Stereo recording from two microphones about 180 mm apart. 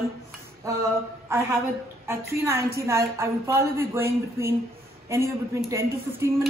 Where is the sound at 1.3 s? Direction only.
15° right (ahead or behind).